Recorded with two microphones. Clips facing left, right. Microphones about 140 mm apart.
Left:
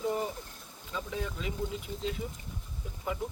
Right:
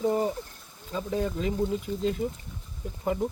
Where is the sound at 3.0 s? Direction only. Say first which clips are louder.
Right 7 dB; 45° right (ahead or behind).